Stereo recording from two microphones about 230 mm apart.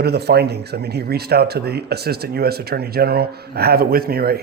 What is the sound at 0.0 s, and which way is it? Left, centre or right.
A man's voice, right.